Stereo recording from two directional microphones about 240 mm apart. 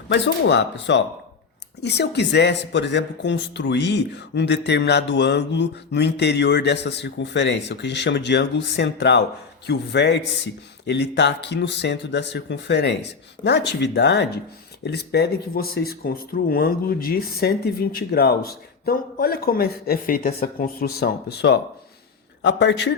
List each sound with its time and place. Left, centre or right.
0.1 s speech: left